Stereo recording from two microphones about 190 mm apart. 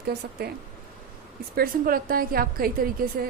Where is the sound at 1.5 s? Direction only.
50° right (ahead or behind).